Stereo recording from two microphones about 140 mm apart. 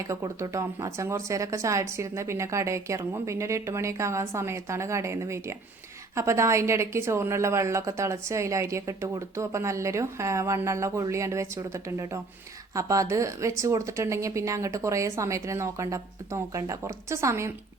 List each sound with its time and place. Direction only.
0.1 s a woman's voice: 20° right (ahead or behind)